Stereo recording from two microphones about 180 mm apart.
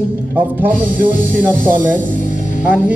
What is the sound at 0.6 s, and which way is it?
Speech, 50° right (ahead or behind).